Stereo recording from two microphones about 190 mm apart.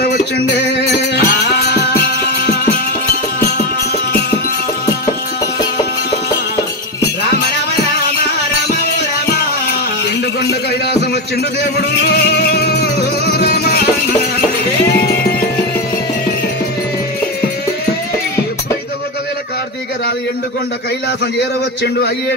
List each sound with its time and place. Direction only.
0.0 s music: 60° left (ahead or behind)
10.4 s a sound: 60° left (ahead or behind)
11.6 s music: 60° left (ahead or behind)
21.4 s a man's voice: 60° left (ahead or behind)